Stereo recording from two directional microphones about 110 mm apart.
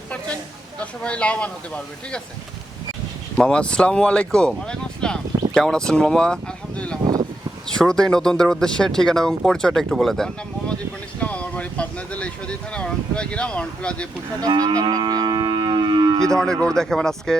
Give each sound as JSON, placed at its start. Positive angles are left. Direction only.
{"t": 0.8, "sound": "speech", "side_deg": 10}
{"t": 3.3, "sound": "speech", "side_deg": 10}
{"t": 14.4, "sound": "livestock", "side_deg": -35}
{"t": 16.3, "sound": "speech", "side_deg": 5}